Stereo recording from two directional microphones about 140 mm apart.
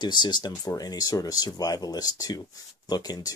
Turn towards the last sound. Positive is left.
turn(degrees=25)  # may be behind; listen again after turning